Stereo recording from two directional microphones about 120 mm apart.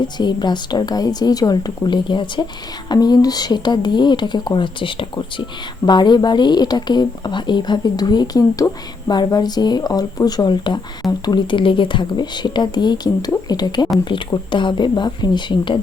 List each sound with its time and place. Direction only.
0.2 s speech: 40° left (ahead or behind)